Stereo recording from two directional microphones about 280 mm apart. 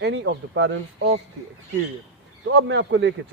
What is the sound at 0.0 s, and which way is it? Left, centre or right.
A man's voice, right.